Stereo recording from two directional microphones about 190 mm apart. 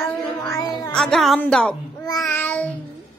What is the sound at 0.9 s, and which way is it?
Speech, 5° left (ahead or behind).